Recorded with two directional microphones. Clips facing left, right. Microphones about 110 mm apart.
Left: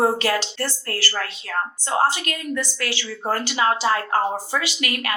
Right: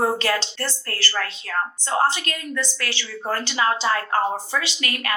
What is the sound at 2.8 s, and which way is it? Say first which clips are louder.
Speech: left 2 dB; 35° left (ahead or behind).